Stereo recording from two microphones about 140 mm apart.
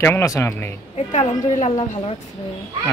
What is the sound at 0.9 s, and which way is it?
Speech, 55° left (ahead or behind).